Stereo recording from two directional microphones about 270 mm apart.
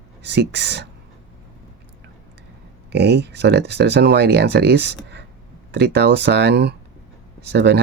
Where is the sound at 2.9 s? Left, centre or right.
Right.